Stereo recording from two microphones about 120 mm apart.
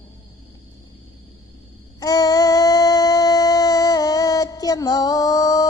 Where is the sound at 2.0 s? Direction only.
30° left (ahead or behind).